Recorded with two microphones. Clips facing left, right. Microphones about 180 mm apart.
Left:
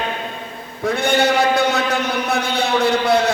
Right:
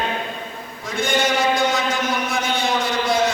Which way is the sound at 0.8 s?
65° left (ahead or behind).